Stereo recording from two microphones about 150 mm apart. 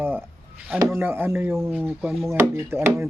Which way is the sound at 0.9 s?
15° right (ahead or behind).